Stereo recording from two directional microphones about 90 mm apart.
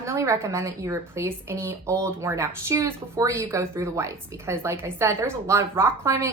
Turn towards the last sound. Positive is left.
turn(degrees=-30)  # may be behind; listen again after turning